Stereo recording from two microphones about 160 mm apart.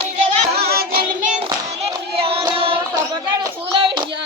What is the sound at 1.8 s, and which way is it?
Child singing, 35° right (ahead or behind).